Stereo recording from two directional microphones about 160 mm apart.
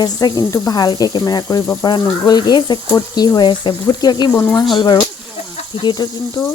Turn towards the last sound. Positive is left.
turn(degrees=25)  # may be behind; listen again after turning